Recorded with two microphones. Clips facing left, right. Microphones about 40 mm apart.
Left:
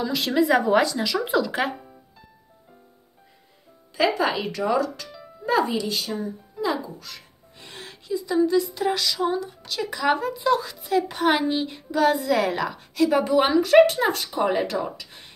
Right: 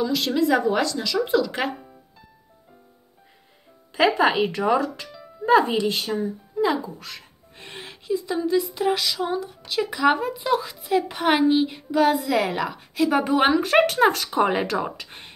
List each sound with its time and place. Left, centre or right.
0.0 s speech: centre
3.9 s a woman's voice: right; by 13.2 s centre
13.2 s speech: right